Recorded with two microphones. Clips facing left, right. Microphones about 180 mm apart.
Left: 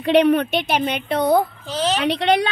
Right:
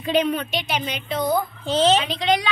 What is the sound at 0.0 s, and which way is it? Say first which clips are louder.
A woman's voice: left 6 dB; 70° left (ahead or behind).